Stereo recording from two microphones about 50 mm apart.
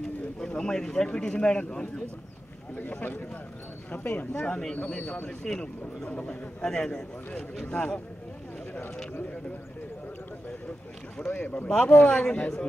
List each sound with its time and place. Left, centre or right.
0.6 s a man's voice: centre
2.8 s speech: left
4.8 s a man's voice: centre
11.1 s speech: left